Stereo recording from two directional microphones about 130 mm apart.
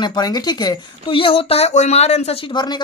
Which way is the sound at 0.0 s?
30° left (ahead or behind).